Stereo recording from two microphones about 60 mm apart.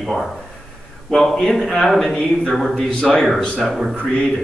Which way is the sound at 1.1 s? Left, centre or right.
Centre.